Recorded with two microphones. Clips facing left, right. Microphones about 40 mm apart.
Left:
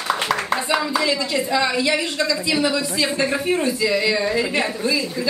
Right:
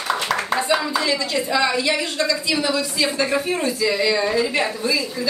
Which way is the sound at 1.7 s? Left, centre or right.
Centre.